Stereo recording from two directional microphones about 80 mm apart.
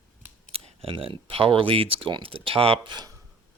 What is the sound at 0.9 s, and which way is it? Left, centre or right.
Speech, right.